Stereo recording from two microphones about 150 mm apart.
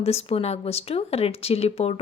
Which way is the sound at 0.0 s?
40° left (ahead or behind).